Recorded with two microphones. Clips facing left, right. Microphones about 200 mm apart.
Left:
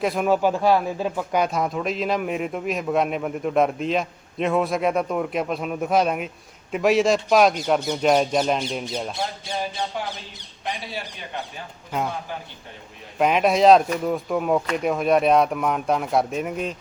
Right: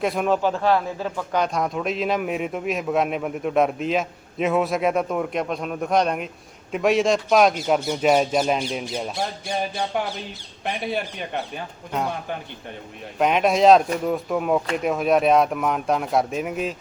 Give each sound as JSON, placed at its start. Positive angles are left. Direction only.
{"t": 0.0, "sound": "a man's voice", "side_deg": 0}
{"t": 10.7, "sound": "speech", "side_deg": -55}
{"t": 13.1, "sound": "a man's voice", "side_deg": 0}